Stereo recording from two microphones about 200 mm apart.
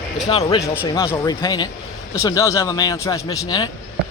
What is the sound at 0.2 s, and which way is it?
A man's voice, 20° left (ahead or behind).